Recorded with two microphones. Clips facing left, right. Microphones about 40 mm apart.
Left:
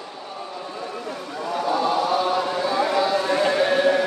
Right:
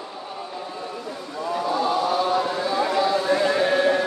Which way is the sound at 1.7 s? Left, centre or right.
Centre.